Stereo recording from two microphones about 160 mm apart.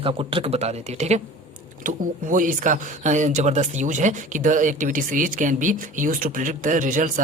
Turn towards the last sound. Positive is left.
turn(degrees=-55)  # may be behind; listen again after turning